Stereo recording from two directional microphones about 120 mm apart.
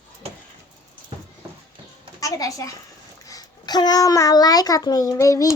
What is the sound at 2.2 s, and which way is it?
A child's voice, 30° left (ahead or behind).